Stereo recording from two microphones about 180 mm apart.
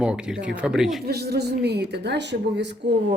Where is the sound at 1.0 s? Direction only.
60° right (ahead or behind).